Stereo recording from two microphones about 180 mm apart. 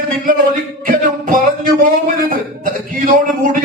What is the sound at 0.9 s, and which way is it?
Music, 50° right (ahead or behind).